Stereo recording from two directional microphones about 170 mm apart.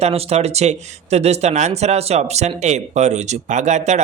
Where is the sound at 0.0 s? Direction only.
35° right (ahead or behind).